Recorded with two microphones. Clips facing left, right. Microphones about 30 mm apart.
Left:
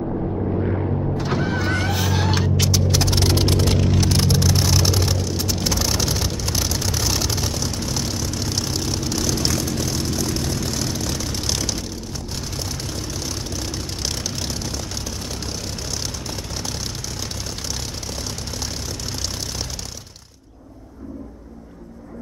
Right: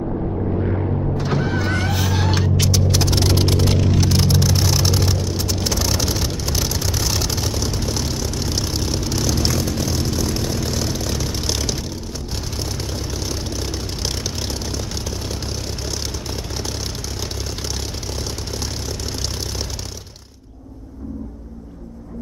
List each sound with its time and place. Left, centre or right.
0.7 s vehicle: centre
13.3 s vehicle: centre